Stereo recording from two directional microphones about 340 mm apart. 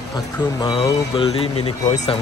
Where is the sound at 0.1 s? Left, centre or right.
Centre.